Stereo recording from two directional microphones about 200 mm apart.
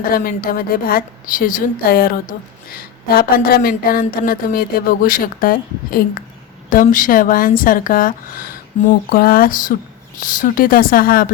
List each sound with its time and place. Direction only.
0.0 s speech: 45° left (ahead or behind)